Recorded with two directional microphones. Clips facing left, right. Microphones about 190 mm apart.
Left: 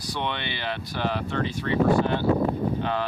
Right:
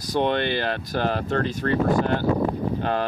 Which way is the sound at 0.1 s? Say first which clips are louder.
Right 9 dB; 45° right (ahead or behind).